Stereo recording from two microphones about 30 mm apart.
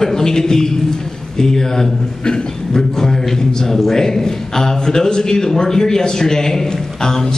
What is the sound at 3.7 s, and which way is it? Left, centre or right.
A man's voice, centre.